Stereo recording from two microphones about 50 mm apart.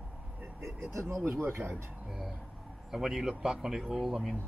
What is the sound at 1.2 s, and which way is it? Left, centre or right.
Speech, right.